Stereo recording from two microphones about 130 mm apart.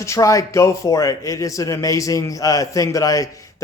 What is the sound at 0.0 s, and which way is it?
A man's voice, 25° left (ahead or behind).